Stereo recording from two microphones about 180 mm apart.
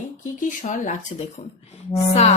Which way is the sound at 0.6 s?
45° left (ahead or behind).